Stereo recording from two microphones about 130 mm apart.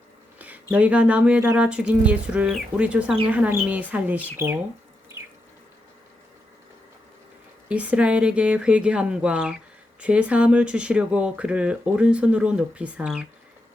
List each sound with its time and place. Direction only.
0.3 s a sound: 10° right (ahead or behind)
0.7 s speech: 10° right (ahead or behind)
5.2 s water tap: 20° right (ahead or behind)
7.7 s speech: 10° right (ahead or behind)